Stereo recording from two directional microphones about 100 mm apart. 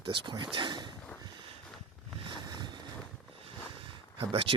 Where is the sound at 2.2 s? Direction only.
55° right (ahead or behind).